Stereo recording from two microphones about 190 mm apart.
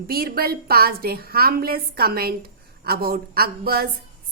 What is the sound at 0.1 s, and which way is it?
A woman's voice, 50° right (ahead or behind).